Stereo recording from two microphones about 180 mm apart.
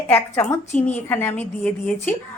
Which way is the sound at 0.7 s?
40° left (ahead or behind).